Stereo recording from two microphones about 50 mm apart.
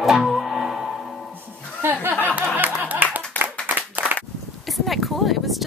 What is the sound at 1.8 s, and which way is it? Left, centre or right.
Clapping, right.